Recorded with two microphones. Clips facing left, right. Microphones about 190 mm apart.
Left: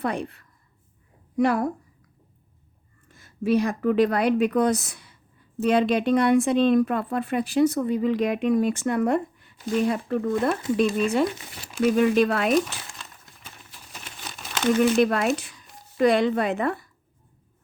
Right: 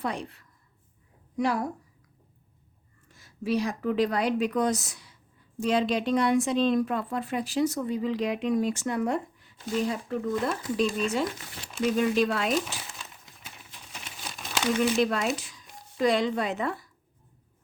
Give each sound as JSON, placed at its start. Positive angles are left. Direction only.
{"t": 0.0, "sound": "a woman's voice", "side_deg": 55}
{"t": 3.1, "sound": "a woman's voice", "side_deg": 55}
{"t": 12.6, "sound": "crumpling", "side_deg": -5}
{"t": 14.8, "sound": "a woman's voice", "side_deg": 60}